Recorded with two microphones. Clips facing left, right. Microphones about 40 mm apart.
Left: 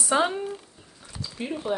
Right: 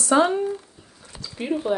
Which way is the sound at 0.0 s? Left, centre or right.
Centre.